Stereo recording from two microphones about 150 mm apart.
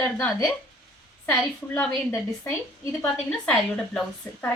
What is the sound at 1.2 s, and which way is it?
A woman's voice, 15° left (ahead or behind).